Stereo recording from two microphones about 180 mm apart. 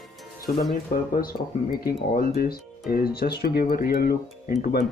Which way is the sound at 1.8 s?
55° left (ahead or behind).